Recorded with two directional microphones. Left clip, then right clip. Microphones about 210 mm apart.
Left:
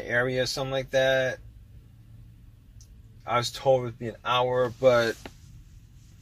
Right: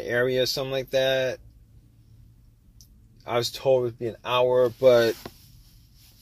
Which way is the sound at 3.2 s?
40° right (ahead or behind).